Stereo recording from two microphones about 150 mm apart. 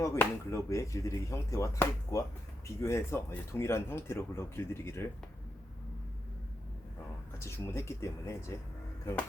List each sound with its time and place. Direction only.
0.0 s speech: 20° left (ahead or behind)
7.3 s speech: 15° left (ahead or behind)